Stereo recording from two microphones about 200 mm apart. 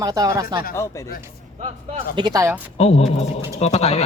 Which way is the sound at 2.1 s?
20° right (ahead or behind).